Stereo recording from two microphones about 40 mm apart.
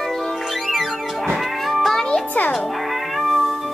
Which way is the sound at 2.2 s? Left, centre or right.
Left.